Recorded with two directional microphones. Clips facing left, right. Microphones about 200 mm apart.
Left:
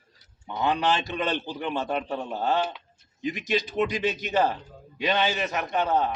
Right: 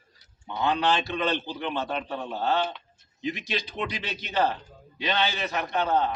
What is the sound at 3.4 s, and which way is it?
Speech, 45° left (ahead or behind).